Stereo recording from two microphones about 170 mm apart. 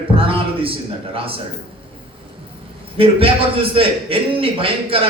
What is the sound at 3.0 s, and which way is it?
A man's voice, 35° right (ahead or behind).